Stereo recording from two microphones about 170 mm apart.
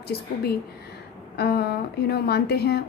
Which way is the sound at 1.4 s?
70° left (ahead or behind).